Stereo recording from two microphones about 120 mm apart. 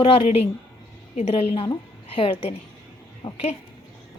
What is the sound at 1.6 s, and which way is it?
A woman's voice, 45° left (ahead or behind).